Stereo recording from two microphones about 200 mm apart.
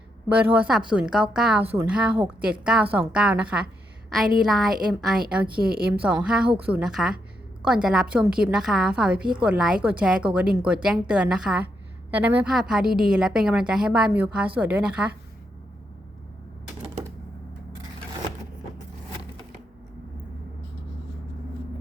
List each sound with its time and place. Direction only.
0.3 s a woman's voice: 5° right (ahead or behind)
5.5 s a woman's voice: 50° right (ahead or behind)
6.2 s a woman's voice: 5° right (ahead or behind)